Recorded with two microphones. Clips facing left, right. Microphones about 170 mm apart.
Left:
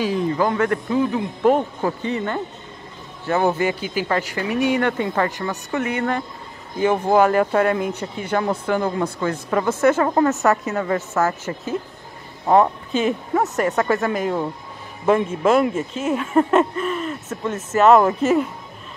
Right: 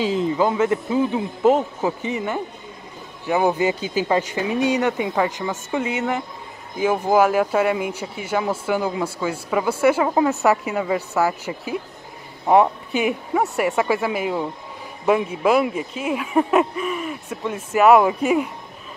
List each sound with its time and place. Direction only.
0.0 s speech: 20° right (ahead or behind)
1.6 s speech: 10° right (ahead or behind)